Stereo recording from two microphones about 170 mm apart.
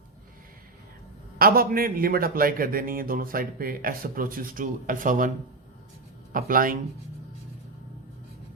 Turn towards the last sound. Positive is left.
turn(degrees=-55)  # may be behind; listen again after turning